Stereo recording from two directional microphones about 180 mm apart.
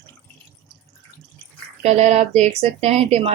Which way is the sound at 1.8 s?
40° right (ahead or behind).